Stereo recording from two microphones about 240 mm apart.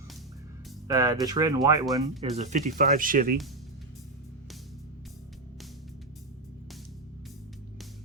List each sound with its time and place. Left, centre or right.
0.9 s speech: centre
2.4 s speech: right